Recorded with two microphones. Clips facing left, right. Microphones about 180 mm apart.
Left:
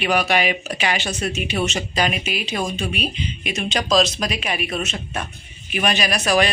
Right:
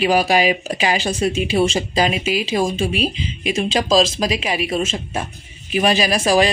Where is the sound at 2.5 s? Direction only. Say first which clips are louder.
Right 5 dB; 30° right (ahead or behind).